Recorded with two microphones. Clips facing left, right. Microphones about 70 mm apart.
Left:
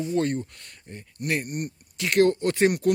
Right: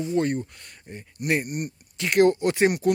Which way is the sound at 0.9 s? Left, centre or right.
Centre.